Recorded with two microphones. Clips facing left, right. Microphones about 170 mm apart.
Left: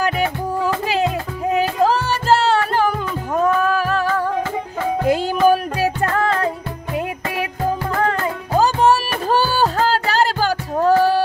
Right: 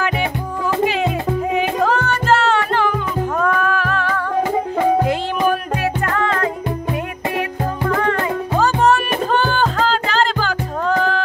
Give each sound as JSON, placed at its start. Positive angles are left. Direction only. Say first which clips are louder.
{"t": 2.0, "sound": "music", "louder": "even", "side_deg": 35}
{"t": 8.0, "sound": "music", "louder": "right 1 dB", "side_deg": 35}
{"t": 9.3, "sound": "music", "louder": "left 2 dB", "side_deg": 5}
{"t": 10.8, "sound": "music", "louder": "left 5 dB", "side_deg": 35}